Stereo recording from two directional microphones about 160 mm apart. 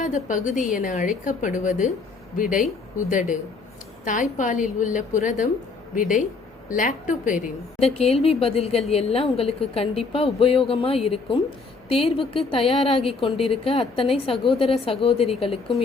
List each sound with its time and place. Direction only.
0.0 s a woman's voice: 55° left (ahead or behind)
7.8 s a woman's voice: 40° left (ahead or behind)